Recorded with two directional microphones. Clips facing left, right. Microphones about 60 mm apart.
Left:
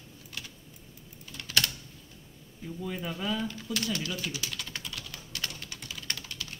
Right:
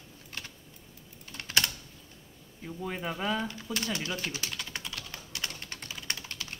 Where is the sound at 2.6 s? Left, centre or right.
Right.